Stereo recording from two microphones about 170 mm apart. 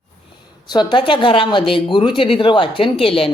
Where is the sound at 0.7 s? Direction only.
25° left (ahead or behind).